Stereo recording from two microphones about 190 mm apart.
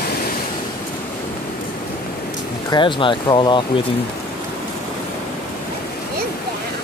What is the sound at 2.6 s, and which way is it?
Speech, 25° left (ahead or behind).